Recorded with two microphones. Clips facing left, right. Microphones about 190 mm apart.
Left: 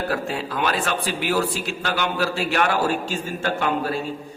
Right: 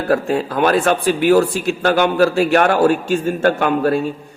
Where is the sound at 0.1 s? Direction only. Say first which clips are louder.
Right 9 dB; 50° right (ahead or behind).